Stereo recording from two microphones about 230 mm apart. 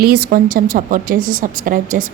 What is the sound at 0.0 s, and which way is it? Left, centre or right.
A woman's voice, right.